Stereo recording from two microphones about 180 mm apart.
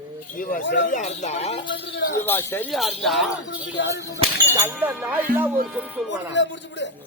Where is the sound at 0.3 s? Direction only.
50° left (ahead or behind).